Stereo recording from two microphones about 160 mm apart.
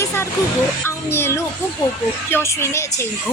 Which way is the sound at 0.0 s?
15° left (ahead or behind).